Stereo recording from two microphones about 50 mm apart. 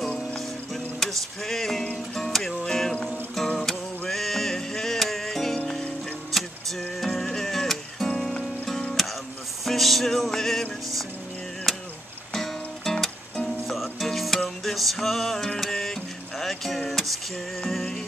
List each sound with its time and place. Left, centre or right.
0.7 s music: centre
4.1 s music: centre
6.3 s vehicle: centre
7.2 s music: centre
8.2 s music: left
9.0 s music: centre
11.7 s a sound: centre
12.4 s music: centre